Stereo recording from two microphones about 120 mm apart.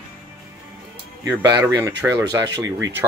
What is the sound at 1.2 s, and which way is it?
Speech, 30° right (ahead or behind).